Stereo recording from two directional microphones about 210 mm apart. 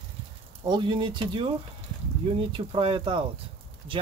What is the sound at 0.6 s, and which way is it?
Speech, 20° right (ahead or behind).